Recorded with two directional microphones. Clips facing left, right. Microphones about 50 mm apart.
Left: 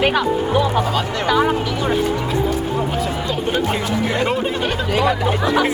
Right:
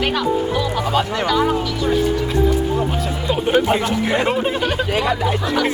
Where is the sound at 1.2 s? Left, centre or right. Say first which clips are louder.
Left 4 dB; centre.